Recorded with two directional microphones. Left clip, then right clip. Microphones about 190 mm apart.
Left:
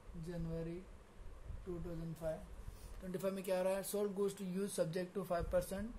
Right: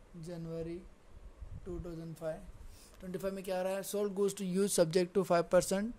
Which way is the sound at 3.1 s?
15° right (ahead or behind).